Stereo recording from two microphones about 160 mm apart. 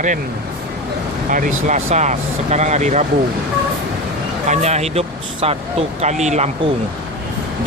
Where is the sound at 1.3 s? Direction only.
55° right (ahead or behind).